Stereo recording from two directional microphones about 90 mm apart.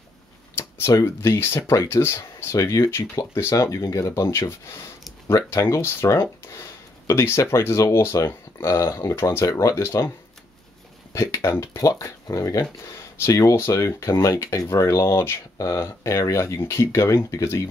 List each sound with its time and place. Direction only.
0.6 s speech: 30° left (ahead or behind)
11.1 s a sound: 30° left (ahead or behind)
11.6 s speech: 35° left (ahead or behind)